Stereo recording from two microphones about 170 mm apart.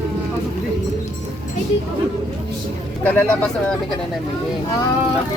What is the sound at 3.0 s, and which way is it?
Speech, 10° left (ahead or behind).